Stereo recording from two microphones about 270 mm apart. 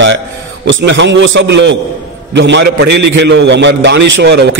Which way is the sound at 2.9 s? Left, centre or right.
Right.